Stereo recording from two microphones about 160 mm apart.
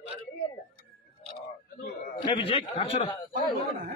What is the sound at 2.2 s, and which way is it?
A man's voice, 35° left (ahead or behind).